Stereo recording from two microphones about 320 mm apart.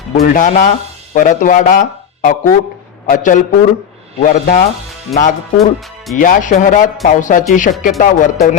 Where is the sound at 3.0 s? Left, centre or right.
Left.